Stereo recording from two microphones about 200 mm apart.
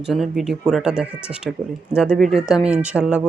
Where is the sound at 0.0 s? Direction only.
Centre (ahead or behind).